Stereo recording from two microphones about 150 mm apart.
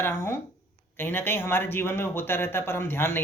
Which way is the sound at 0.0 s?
15° left (ahead or behind).